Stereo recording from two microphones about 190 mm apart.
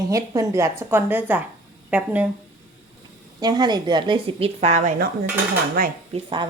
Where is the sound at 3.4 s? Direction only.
20° right (ahead or behind); by 4.9 s 40° right (ahead or behind).